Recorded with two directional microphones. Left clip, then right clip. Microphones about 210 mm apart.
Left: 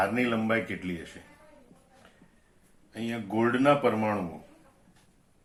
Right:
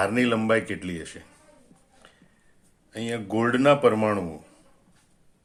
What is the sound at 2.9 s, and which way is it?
Speech, 50° right (ahead or behind).